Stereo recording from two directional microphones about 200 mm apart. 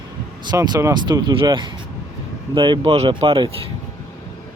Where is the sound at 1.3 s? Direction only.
25° right (ahead or behind).